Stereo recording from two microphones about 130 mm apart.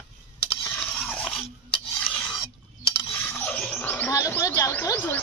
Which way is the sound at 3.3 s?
10° left (ahead or behind).